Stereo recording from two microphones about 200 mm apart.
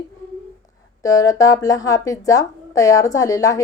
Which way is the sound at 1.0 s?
15° left (ahead or behind).